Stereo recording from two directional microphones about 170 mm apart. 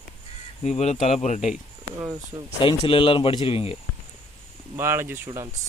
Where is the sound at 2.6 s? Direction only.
30° left (ahead or behind).